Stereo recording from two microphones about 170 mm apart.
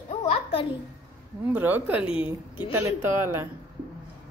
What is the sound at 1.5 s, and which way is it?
Speech, 10° right (ahead or behind).